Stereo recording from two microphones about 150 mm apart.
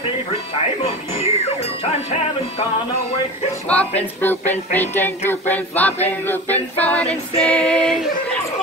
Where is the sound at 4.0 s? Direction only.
15° left (ahead or behind).